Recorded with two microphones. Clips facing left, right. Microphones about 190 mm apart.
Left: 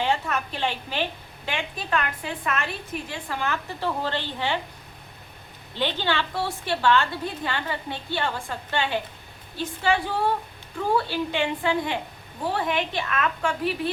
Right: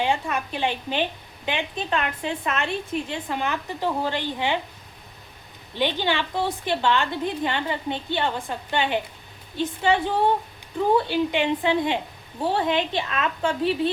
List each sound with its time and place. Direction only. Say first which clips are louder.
0.0 s a woman's voice: right 1 dB; 15° right (ahead or behind)
5.7 s a woman's voice: right 2 dB; 15° right (ahead or behind)